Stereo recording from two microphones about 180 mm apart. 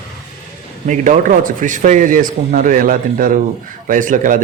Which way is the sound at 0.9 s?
45° right (ahead or behind).